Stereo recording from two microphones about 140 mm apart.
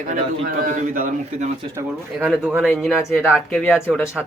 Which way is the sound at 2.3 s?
5° right (ahead or behind).